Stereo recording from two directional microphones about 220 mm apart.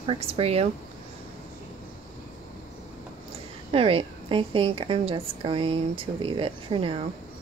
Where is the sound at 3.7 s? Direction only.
25° right (ahead or behind).